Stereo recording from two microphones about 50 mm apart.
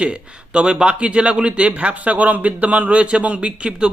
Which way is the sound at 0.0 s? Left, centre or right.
Right.